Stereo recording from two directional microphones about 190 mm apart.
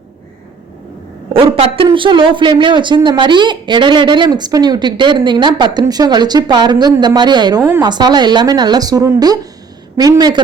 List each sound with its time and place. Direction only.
1.3 s a man's voice: 30° right (ahead or behind)